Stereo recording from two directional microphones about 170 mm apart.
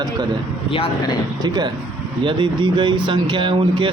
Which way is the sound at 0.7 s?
30° left (ahead or behind).